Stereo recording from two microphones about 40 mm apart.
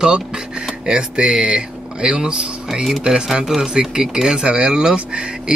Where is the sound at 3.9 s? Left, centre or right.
Centre.